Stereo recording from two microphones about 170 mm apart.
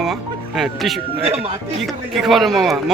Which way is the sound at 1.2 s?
35° right (ahead or behind).